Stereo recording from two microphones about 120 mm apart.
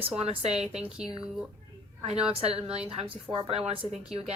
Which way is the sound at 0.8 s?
5° right (ahead or behind).